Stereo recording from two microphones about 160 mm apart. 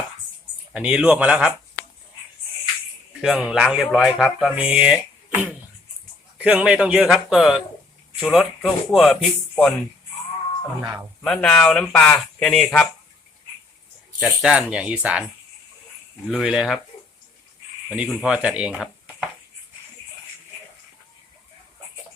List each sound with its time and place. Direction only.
0.7 s speech: 5° right (ahead or behind)
3.2 s speech: 5° right (ahead or behind)
11.2 s speech: 5° left (ahead or behind)
14.2 s speech: 5° right (ahead or behind)
16.3 s speech: 5° right (ahead or behind)
17.9 s speech: 5° right (ahead or behind)